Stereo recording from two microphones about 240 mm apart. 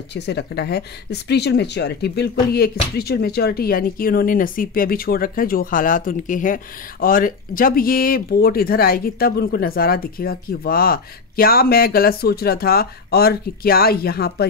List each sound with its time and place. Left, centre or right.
0.1 s speech: left